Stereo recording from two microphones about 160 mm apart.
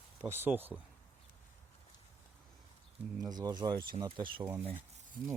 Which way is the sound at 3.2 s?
25° right (ahead or behind).